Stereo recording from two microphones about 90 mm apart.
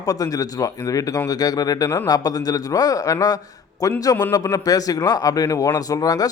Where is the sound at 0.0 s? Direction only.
40° left (ahead or behind).